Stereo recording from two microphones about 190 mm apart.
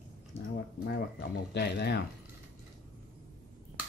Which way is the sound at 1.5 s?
60° left (ahead or behind).